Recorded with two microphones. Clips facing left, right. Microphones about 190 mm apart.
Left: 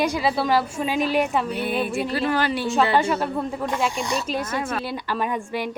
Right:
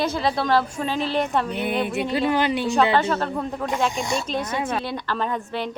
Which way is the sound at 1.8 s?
20° right (ahead or behind).